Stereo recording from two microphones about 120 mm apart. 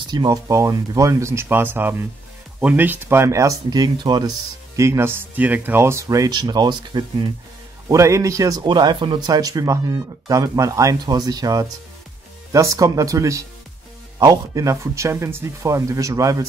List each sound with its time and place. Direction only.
0.1 s speech: 35° right (ahead or behind)
4.7 s speech: 20° right (ahead or behind); by 7.2 s 40° right (ahead or behind)
7.9 s speech: 25° right (ahead or behind)